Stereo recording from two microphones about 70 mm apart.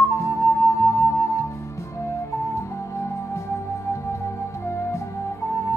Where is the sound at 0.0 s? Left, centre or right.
Left.